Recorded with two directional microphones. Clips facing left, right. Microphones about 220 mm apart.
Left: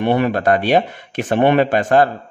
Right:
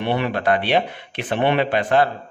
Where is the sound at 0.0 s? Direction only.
45° left (ahead or behind).